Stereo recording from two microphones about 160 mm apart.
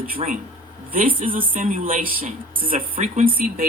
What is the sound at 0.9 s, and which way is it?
Speech, 55° right (ahead or behind).